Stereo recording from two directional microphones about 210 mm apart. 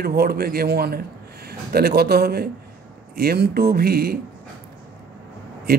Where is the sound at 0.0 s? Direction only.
45° right (ahead or behind).